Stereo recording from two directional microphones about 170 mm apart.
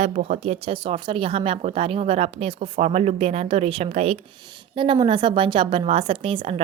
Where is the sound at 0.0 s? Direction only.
40° right (ahead or behind).